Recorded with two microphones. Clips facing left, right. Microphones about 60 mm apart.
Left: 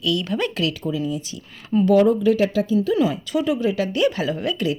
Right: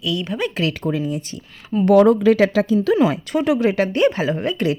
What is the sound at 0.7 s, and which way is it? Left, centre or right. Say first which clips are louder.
Speech: right 2 dB; right.